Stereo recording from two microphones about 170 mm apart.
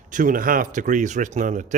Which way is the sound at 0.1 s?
50° right (ahead or behind).